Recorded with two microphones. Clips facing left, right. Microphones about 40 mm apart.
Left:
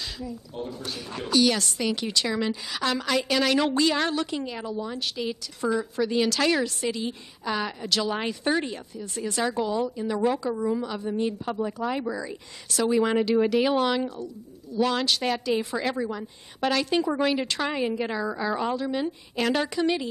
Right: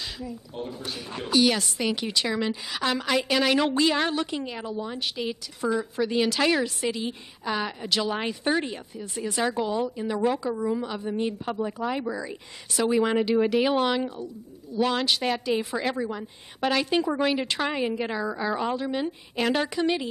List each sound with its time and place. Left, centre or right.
0.0 s a woman's voice: centre
10.8 s a woman's voice: centre